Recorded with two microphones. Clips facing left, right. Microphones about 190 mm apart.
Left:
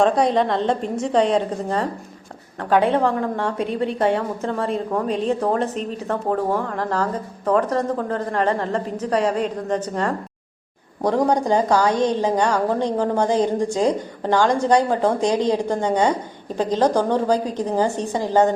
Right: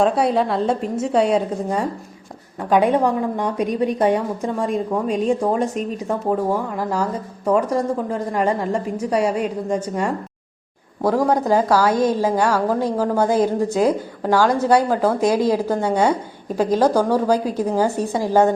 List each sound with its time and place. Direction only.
0.0 s a woman's voice: 5° right (ahead or behind)
11.3 s a woman's voice: 5° right (ahead or behind)